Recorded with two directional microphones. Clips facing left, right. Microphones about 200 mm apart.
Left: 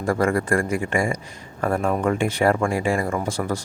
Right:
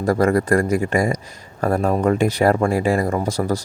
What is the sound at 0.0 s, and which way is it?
Speech, 40° right (ahead or behind).